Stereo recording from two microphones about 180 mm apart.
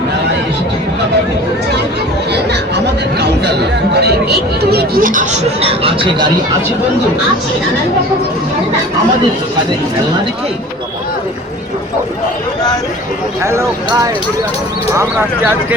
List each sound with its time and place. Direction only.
2.3 s chatter: 70° right (ahead or behind); by 6.2 s 30° right (ahead or behind)
13.4 s speech: 15° right (ahead or behind)